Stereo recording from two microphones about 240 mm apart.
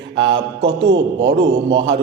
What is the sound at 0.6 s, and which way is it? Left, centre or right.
A man's voice, right.